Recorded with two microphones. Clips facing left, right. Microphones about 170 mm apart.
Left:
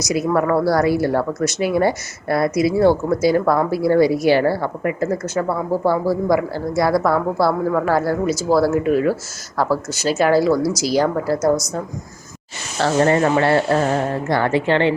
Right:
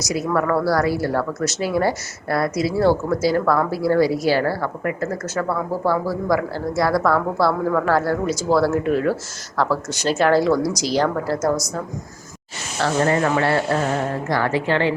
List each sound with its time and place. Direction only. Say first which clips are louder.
0.0 s speech: left 3 dB; 20° left (ahead or behind)
12.8 s speech: left 3 dB; 30° left (ahead or behind)